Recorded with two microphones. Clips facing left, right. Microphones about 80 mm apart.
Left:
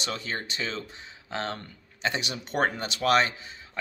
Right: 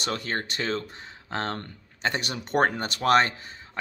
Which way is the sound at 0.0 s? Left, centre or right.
Right.